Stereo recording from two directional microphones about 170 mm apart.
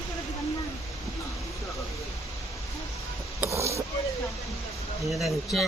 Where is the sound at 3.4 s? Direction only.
15° right (ahead or behind).